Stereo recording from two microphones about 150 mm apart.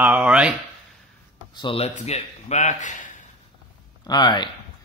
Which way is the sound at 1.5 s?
35° left (ahead or behind).